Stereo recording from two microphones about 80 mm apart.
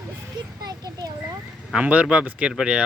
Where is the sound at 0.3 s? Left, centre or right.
Right.